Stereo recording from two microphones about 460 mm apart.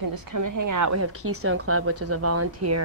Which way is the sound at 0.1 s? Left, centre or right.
Right.